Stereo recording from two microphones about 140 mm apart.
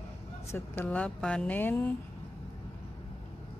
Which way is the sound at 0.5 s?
15° left (ahead or behind).